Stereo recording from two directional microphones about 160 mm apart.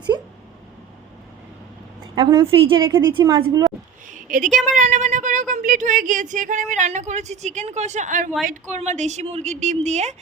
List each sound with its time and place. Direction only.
2.1 s a woman's voice: 25° right (ahead or behind)
4.1 s speech: 55° right (ahead or behind)